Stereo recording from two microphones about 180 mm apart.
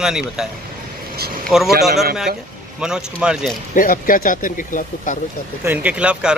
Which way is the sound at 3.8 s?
50° left (ahead or behind).